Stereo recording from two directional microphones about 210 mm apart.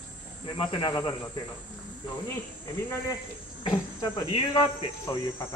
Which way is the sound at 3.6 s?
20° left (ahead or behind).